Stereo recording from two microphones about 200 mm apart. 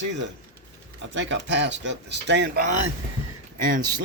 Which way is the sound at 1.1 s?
65° right (ahead or behind).